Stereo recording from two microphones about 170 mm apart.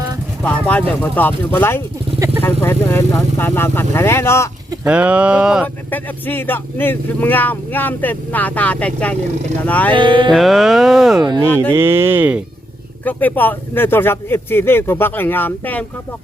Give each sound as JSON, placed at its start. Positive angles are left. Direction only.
{"t": 0.4, "sound": "speech", "side_deg": 10}
{"t": 2.1, "sound": "speech", "side_deg": -20}
{"t": 2.4, "sound": "speech", "side_deg": 15}
{"t": 4.9, "sound": "speech", "side_deg": -10}
{"t": 5.6, "sound": "speech", "side_deg": 10}
{"t": 9.9, "sound": "music", "side_deg": -30}
{"t": 10.3, "sound": "speech", "side_deg": 0}
{"t": 11.2, "sound": "music", "side_deg": -25}
{"t": 11.7, "sound": "speech", "side_deg": -15}
{"t": 13.1, "sound": "speech", "side_deg": 10}